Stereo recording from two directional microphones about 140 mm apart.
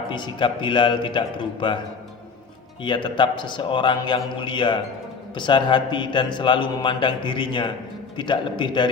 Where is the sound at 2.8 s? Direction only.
35° left (ahead or behind).